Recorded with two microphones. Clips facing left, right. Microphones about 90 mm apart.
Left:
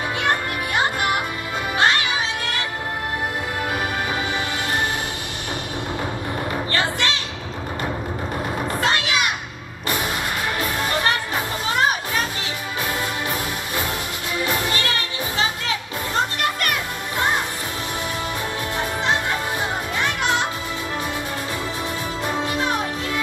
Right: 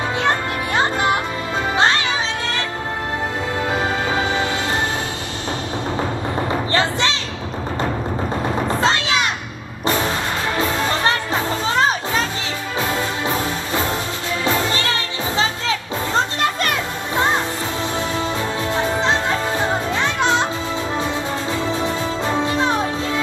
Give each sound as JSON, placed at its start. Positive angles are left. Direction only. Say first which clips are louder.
{"t": 3.7, "sound": "music", "louder": "right 5 dB", "side_deg": -25}
{"t": 6.5, "sound": "music", "louder": "right 4 dB", "side_deg": -25}
{"t": 8.6, "sound": "a sound", "louder": "right 2 dB", "side_deg": -25}
{"t": 9.8, "sound": "vehicle", "louder": "right 5 dB", "side_deg": -25}
{"t": 10.6, "sound": "music", "louder": "right 4 dB", "side_deg": -25}
{"t": 16.2, "sound": "children playing", "louder": "right 2 dB", "side_deg": -25}
{"t": 18.8, "sound": "music", "louder": "right 3 dB", "side_deg": -25}
{"t": 21.8, "sound": "music", "louder": "right 5 dB", "side_deg": -25}